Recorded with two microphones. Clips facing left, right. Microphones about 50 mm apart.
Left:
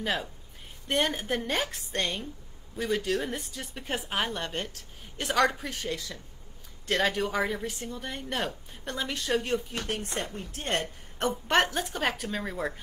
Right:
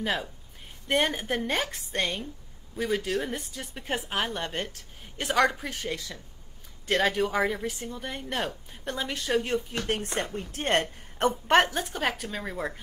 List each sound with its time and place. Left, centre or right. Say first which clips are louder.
0.8 s speech: right 2 dB; centre
4.4 s speech: right 1 dB; centre
9.8 s speech: right 3 dB; right
11.1 s a woman's voice: right 4 dB; right
11.6 s speech: even; centre